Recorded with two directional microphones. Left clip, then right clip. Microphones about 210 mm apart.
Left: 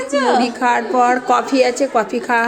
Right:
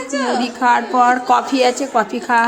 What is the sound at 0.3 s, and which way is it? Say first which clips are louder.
A woman's voice: even; 5° right (ahead or behind).